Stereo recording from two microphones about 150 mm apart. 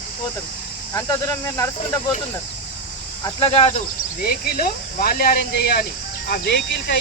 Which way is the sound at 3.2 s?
35° left (ahead or behind).